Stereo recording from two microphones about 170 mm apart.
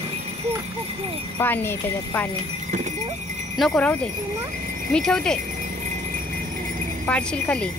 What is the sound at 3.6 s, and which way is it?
Speech, 5° left (ahead or behind).